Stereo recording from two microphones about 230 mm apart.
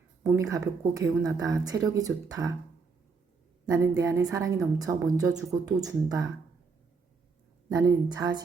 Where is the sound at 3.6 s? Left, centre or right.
Centre.